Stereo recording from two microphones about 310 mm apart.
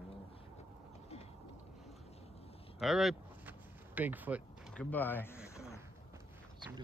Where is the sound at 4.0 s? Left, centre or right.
Centre.